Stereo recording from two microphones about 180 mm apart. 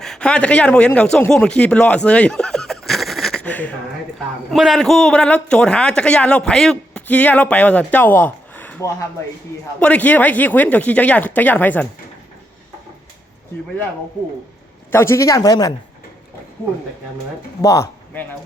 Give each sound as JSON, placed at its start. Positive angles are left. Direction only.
{"t": 0.0, "sound": "a man's voice", "side_deg": 5}
{"t": 14.9, "sound": "speech", "side_deg": 15}
{"t": 17.6, "sound": "speech", "side_deg": 20}